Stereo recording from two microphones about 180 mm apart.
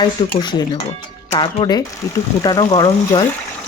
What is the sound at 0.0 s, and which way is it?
Speech, 25° left (ahead or behind).